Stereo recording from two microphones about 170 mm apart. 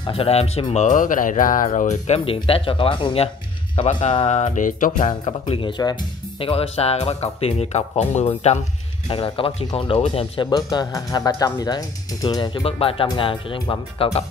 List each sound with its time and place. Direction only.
0.0 s speech: 35° left (ahead or behind)
0.8 s speech: 50° left (ahead or behind)
5.2 s speech: 30° left (ahead or behind)